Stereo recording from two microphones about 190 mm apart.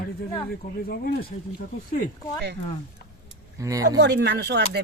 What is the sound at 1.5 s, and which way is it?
Speech, 50° left (ahead or behind).